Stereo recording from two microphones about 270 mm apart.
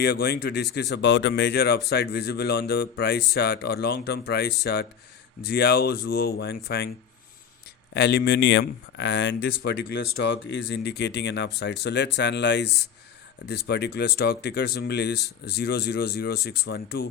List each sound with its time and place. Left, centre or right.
0.0 s speech: left
7.9 s speech: left